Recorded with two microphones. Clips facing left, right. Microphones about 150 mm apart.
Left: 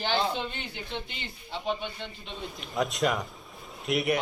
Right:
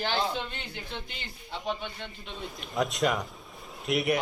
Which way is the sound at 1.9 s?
5° right (ahead or behind).